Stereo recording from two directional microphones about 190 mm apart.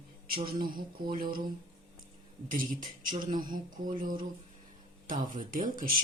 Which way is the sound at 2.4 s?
45° right (ahead or behind).